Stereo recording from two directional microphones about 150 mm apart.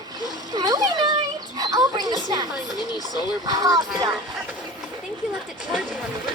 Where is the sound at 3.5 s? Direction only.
25° right (ahead or behind).